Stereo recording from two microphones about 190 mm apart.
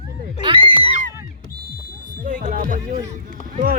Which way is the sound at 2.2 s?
45° right (ahead or behind).